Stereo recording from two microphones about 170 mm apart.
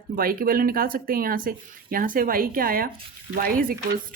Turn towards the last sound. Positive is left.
turn(degrees=-55)  # may be behind; listen again after turning